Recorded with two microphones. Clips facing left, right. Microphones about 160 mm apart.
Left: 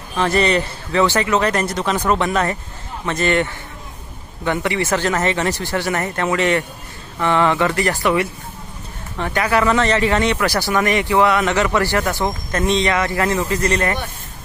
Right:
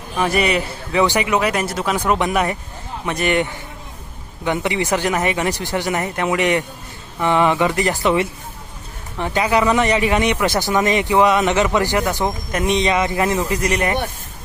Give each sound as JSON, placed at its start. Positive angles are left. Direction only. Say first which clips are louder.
{"t": 0.2, "sound": "speech", "louder": "left 1 dB", "side_deg": -10}